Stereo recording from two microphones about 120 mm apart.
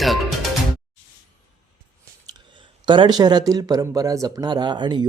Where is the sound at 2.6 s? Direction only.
40° right (ahead or behind).